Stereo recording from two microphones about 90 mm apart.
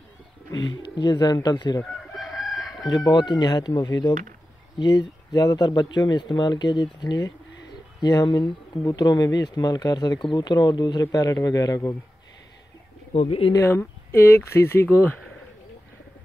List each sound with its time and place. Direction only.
0.5 s speech: 50° left (ahead or behind)
2.1 s chicken: centre (ahead or behind)
2.9 s speech: 50° left (ahead or behind)
13.1 s speech: 90° left
13.6 s speech: 30° left (ahead or behind)